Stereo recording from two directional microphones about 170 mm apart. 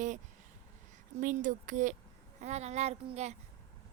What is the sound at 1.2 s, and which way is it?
A woman's voice, 50° right (ahead or behind).